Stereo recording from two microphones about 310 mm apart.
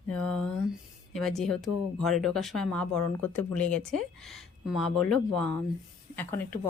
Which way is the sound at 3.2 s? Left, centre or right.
Left.